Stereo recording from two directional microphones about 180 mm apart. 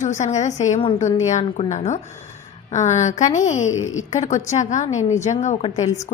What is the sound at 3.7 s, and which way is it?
Speech, 90° left.